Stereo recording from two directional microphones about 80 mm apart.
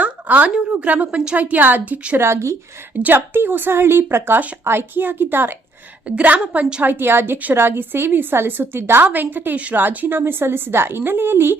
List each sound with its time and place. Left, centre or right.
0.0 s a woman's voice: centre
2.1 s a woman's voice: right; by 6.8 s centre
6.8 s a woman's voice: right